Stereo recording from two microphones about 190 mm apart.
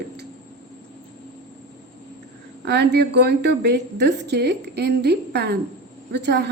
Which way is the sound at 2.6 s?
60° right (ahead or behind).